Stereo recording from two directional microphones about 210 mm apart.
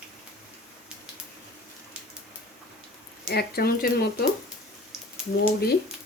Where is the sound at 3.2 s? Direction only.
45° left (ahead or behind).